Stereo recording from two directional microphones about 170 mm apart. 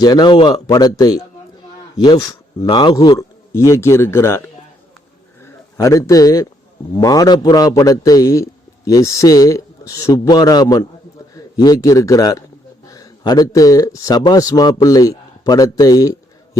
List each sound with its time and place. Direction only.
0.0 s a man's voice: 25° left (ahead or behind)